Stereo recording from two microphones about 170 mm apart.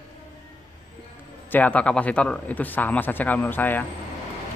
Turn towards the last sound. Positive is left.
turn(degrees=10)  # may be behind; listen again after turning